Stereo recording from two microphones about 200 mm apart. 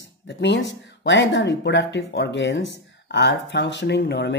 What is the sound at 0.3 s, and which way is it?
Speech, 60° left (ahead or behind).